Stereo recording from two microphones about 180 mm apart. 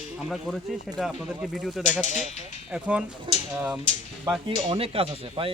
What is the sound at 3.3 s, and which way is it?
Speech, 25° right (ahead or behind).